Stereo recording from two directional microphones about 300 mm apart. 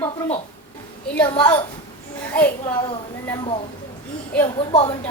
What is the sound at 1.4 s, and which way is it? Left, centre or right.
Speech, centre.